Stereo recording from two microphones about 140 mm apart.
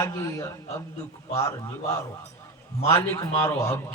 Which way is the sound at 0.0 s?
20° left (ahead or behind).